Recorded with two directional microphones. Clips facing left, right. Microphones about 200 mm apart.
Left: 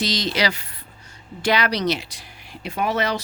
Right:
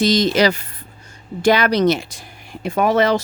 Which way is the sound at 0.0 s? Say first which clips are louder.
Right 8 dB; 50° right (ahead or behind).